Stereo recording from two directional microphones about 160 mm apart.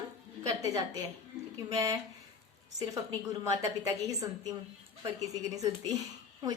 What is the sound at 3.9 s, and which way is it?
A woman's voice, 20° right (ahead or behind).